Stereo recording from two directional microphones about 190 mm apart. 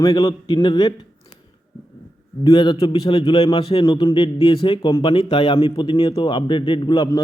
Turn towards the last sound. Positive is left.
turn(degrees=25)  # may be behind; listen again after turning